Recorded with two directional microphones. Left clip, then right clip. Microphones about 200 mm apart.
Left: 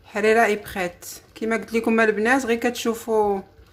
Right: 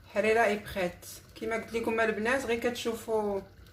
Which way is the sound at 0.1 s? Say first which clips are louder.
Left 8 dB; 45° left (ahead or behind).